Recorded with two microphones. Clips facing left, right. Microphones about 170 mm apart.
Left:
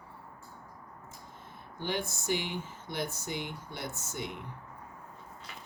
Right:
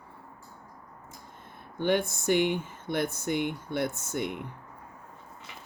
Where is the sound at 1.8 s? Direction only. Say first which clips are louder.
Right 8 dB; 55° right (ahead or behind).